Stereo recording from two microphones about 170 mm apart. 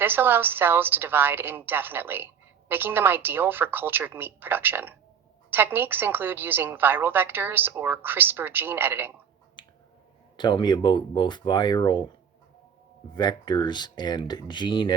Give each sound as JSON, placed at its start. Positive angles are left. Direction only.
{"t": 0.0, "sound": "a woman's voice", "side_deg": -10}
{"t": 9.6, "sound": "finger snapping", "side_deg": 30}
{"t": 10.3, "sound": "speech", "side_deg": 25}
{"t": 13.1, "sound": "speech", "side_deg": 25}